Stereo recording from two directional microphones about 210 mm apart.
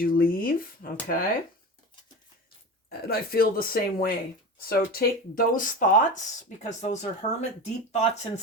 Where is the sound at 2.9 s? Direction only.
45° left (ahead or behind).